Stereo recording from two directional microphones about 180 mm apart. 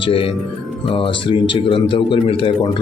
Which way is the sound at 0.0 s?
30° left (ahead or behind).